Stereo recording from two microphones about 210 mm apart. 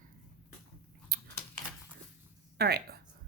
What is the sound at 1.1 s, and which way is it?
Chewing, 50° right (ahead or behind).